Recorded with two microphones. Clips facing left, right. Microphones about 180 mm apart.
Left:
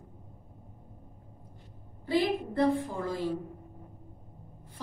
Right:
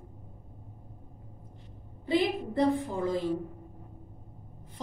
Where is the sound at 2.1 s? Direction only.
20° right (ahead or behind).